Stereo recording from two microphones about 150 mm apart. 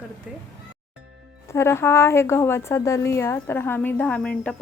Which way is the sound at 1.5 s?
15° left (ahead or behind).